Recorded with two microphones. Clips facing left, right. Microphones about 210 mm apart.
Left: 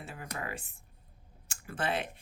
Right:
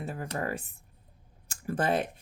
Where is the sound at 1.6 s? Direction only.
40° right (ahead or behind).